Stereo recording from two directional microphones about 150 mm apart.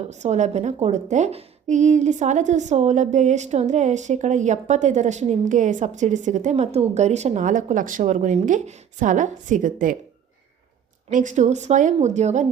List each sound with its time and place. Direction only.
0.1 s a woman's voice: 50° right (ahead or behind)
11.1 s a woman's voice: 60° right (ahead or behind)